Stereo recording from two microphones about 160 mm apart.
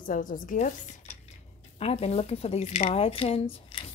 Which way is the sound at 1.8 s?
40° left (ahead or behind).